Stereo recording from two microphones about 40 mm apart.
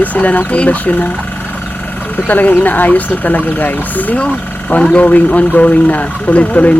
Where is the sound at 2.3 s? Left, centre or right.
Left.